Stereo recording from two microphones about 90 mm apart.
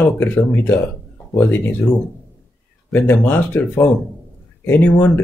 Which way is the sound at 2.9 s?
20° left (ahead or behind).